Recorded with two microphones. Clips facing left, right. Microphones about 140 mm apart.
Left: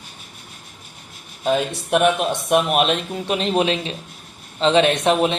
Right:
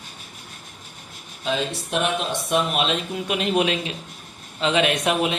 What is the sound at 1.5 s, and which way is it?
Speech, 55° left (ahead or behind).